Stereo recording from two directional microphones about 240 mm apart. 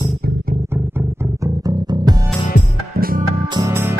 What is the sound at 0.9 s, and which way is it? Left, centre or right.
Music, centre.